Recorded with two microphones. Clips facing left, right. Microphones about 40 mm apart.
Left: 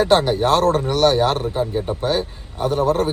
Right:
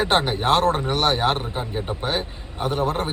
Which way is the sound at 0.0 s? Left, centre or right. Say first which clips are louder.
Left 5 dB; right.